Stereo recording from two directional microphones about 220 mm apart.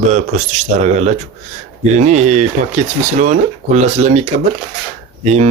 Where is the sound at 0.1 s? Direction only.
30° right (ahead or behind).